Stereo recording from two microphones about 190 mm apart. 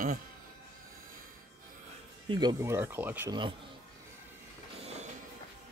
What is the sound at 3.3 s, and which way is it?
Speech, 25° right (ahead or behind).